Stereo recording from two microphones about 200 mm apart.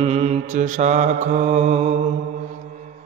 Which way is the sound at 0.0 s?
30° right (ahead or behind).